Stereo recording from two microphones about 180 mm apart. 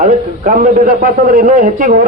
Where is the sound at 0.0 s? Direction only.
45° right (ahead or behind).